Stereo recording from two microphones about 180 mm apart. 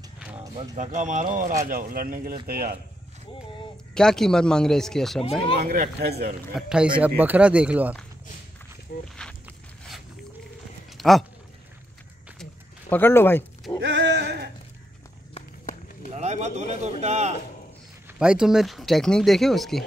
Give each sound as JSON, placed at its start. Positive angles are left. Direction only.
{"t": 0.7, "sound": "speech", "side_deg": -45}
{"t": 3.9, "sound": "speech", "side_deg": 5}
{"t": 5.6, "sound": "speech", "side_deg": -55}
{"t": 6.5, "sound": "speech", "side_deg": -5}
{"t": 8.9, "sound": "speech", "side_deg": 60}
{"t": 11.0, "sound": "speech", "side_deg": 0}
{"t": 12.9, "sound": "speech", "side_deg": 10}
{"t": 13.7, "sound": "a sound", "side_deg": -75}
{"t": 16.1, "sound": "speech", "side_deg": -40}
{"t": 18.2, "sound": "speech", "side_deg": -5}